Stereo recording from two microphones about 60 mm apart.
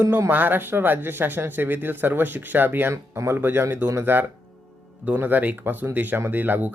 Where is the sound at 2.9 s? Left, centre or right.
Right.